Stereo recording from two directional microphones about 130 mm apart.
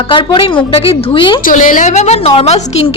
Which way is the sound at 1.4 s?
90° left.